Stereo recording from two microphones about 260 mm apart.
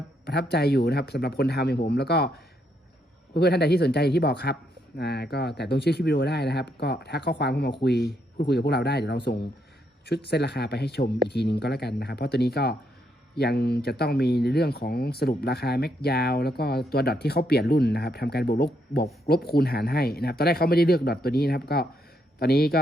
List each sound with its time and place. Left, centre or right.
0.3 s speech: left